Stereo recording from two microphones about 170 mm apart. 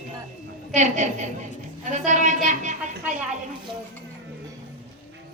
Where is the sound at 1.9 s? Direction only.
45° right (ahead or behind).